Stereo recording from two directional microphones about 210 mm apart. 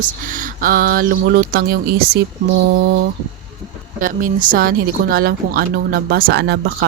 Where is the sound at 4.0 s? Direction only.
40° right (ahead or behind).